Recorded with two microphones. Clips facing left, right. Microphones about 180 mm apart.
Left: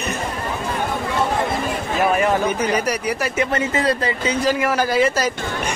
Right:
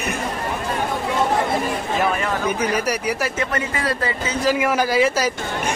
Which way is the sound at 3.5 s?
20° left (ahead or behind).